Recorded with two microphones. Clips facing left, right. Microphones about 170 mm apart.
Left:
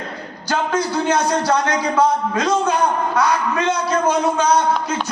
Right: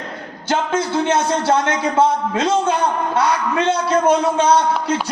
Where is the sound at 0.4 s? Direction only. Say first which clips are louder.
Right 1 dB; 25° right (ahead or behind).